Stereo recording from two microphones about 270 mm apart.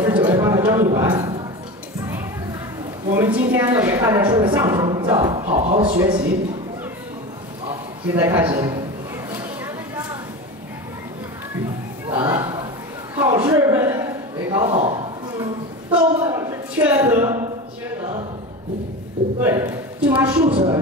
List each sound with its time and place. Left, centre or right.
0.0 s a sound: centre
3.2 s a woman's voice: centre
8.1 s a woman's voice: centre
12.1 s a sound: centre
14.5 s a woman's voice: right
19.4 s speech: centre
20.4 s speech: right